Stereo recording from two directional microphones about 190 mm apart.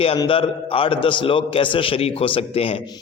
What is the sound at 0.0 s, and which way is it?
A man's voice, 30° left (ahead or behind).